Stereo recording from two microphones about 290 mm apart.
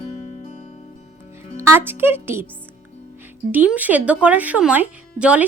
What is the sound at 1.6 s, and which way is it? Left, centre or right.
Speech, centre.